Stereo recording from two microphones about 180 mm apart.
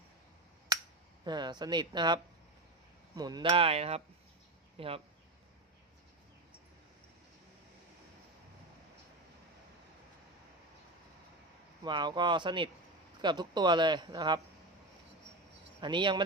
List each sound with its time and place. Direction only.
1.2 s speech: 25° right (ahead or behind)
11.8 s speech: 25° right (ahead or behind)
15.8 s speech: 25° right (ahead or behind)